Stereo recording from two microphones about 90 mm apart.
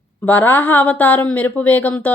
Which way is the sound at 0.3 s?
20° left (ahead or behind).